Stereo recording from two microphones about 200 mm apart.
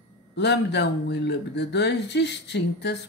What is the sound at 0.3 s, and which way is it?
Speech, 60° left (ahead or behind).